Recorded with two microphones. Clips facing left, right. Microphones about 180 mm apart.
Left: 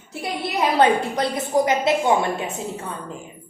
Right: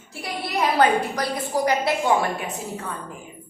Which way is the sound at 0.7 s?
25° left (ahead or behind).